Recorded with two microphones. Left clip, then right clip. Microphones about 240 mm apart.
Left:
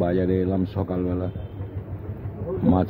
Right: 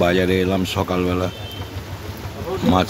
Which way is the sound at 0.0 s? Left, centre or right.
Right.